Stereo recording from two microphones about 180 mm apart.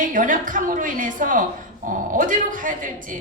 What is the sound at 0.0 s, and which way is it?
A woman's voice, 50° right (ahead or behind).